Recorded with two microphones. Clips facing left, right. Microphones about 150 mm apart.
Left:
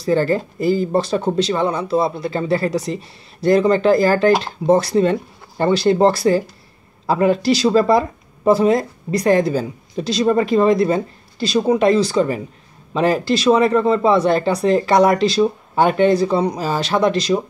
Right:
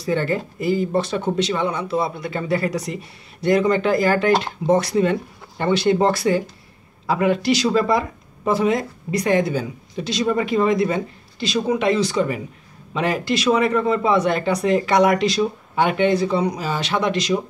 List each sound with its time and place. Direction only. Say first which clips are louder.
0.0 s speech: left 5 dB; 35° left (ahead or behind)